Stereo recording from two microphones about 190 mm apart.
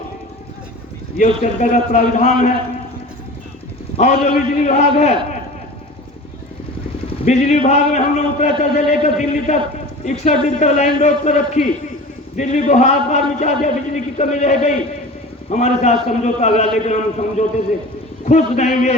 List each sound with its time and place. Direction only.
1.1 s a man's voice: 40° left (ahead or behind)
3.9 s a man's voice: 40° left (ahead or behind)
7.3 s a man's voice: 35° left (ahead or behind)